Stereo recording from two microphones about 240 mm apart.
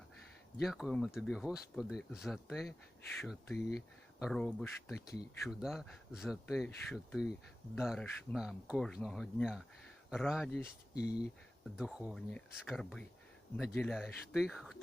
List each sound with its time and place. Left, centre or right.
0.6 s speech: centre
10.9 s speech: left
11.8 s speech: centre